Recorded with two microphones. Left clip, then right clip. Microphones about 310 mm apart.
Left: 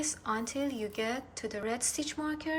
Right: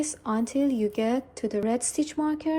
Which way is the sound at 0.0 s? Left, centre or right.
Centre.